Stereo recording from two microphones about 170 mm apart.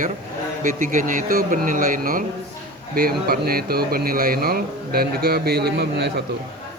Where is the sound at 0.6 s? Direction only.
55° right (ahead or behind); by 6.2 s 70° right (ahead or behind).